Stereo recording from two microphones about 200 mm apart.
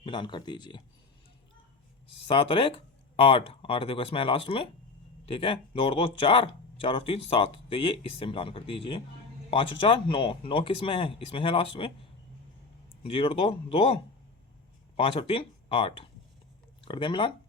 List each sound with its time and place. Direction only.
0.0 s speech: 25° left (ahead or behind)
2.2 s speech: 25° left (ahead or behind)
13.0 s speech: 30° left (ahead or behind)
14.9 s speech: 25° left (ahead or behind)